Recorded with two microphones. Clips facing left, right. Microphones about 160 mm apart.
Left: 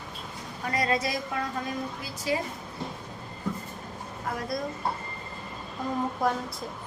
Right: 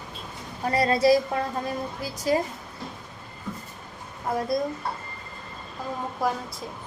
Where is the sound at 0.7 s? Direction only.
35° right (ahead or behind).